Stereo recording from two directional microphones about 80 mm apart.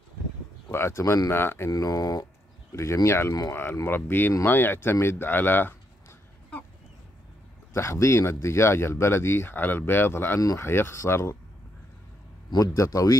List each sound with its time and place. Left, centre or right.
0.7 s speech: left
1.7 s speech: left
2.7 s speech: left
7.7 s speech: left
12.5 s speech: left